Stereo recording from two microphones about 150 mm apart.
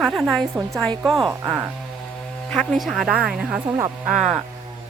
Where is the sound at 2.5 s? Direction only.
5° left (ahead or behind).